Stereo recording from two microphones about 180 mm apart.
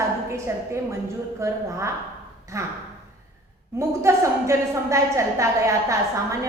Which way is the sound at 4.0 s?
15° right (ahead or behind).